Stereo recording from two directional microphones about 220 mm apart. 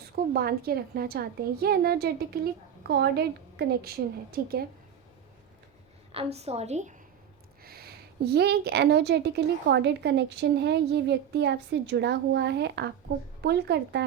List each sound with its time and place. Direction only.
0.3 s a woman's voice: 45° right (ahead or behind)
6.1 s a woman's voice: 25° right (ahead or behind)
7.6 s a woman's voice: 45° right (ahead or behind)